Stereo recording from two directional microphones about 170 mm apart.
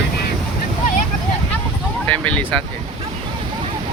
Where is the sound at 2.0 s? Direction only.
10° left (ahead or behind).